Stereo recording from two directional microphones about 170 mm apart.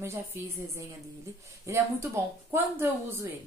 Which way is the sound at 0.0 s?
15° right (ahead or behind).